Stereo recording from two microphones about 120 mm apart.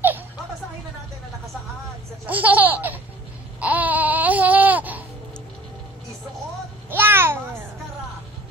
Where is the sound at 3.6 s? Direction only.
10° right (ahead or behind).